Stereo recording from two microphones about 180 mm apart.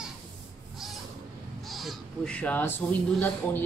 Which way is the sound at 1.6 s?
Centre (ahead or behind).